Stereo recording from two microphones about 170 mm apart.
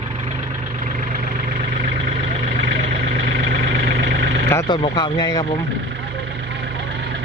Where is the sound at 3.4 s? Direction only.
65° right (ahead or behind).